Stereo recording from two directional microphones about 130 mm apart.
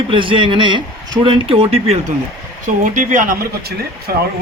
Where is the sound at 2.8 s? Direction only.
90° right.